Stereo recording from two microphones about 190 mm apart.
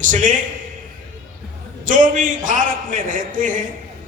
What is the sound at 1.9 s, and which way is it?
A man's voice, 45° right (ahead or behind).